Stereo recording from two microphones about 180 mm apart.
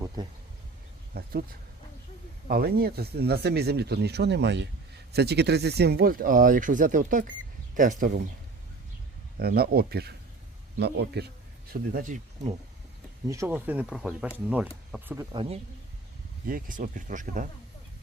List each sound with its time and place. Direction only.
0.2 s speech: 20° right (ahead or behind)
1.1 s a sound: 55° right (ahead or behind)
2.5 s speech: 60° right (ahead or behind)
9.4 s a man's voice: 60° right (ahead or behind)
11.7 s speech: 50° right (ahead or behind)
13.2 s speech: 15° right (ahead or behind)
15.3 s speech: 30° right (ahead or behind)
16.5 s speech: 50° right (ahead or behind)